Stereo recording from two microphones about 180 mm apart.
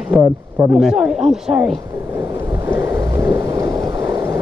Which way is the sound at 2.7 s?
20° right (ahead or behind).